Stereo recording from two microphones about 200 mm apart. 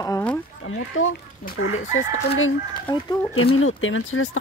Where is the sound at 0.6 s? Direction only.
90° left.